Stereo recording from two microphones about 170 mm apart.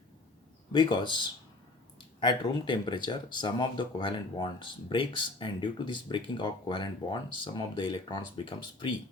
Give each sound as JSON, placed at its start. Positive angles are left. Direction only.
{"t": 0.7, "sound": "speech", "side_deg": 25}